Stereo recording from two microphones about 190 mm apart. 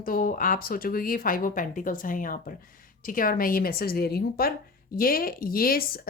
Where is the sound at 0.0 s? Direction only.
50° left (ahead or behind).